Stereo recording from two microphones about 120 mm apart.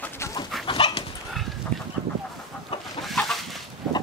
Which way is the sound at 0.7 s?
45° left (ahead or behind).